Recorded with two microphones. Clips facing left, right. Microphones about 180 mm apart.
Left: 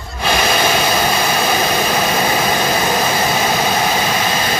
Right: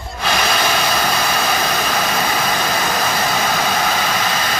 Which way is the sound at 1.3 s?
20° left (ahead or behind).